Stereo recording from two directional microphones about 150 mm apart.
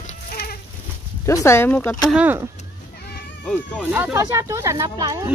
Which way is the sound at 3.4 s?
10° left (ahead or behind).